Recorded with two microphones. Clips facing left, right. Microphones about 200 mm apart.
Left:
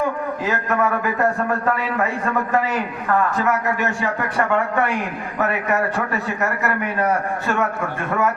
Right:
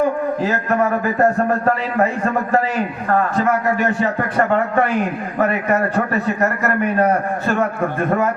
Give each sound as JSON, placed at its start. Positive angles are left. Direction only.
{"t": 0.4, "sound": "a man's voice", "side_deg": -40}